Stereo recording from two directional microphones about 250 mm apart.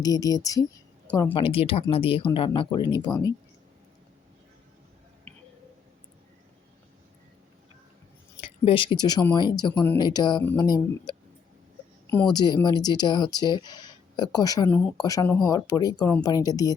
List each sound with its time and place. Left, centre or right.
0.0 s speech: centre
8.4 s speech: left
9.7 s speech: centre